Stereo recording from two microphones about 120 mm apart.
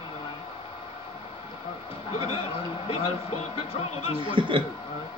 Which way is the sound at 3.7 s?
55° left (ahead or behind).